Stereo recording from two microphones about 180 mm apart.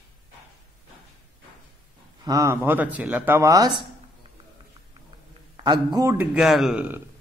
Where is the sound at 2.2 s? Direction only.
15° right (ahead or behind).